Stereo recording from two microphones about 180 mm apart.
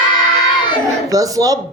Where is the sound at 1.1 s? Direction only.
20° right (ahead or behind).